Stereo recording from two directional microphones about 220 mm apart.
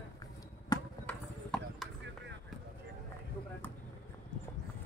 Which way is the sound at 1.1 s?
5° left (ahead or behind).